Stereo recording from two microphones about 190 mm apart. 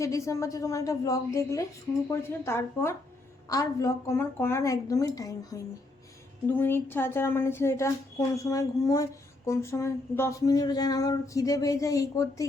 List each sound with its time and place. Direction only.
0.0 s speech: 15° left (ahead or behind)